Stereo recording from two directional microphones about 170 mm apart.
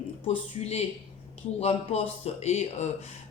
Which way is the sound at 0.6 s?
35° left (ahead or behind).